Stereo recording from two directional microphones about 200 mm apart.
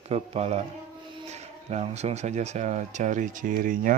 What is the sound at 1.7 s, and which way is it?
Speech, 30° right (ahead or behind).